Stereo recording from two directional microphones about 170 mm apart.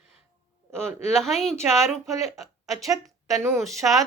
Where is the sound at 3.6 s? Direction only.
Centre (ahead or behind).